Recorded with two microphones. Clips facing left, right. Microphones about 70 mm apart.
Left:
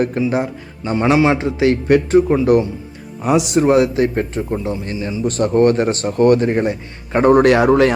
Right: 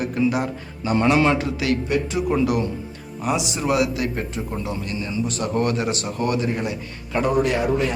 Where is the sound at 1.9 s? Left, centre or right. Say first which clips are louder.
Left 11 dB; left.